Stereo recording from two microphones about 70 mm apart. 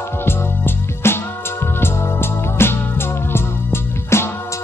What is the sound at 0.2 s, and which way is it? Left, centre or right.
Music, left.